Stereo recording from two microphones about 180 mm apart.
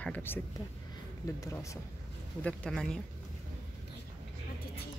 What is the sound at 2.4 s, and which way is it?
Speech, 5° left (ahead or behind).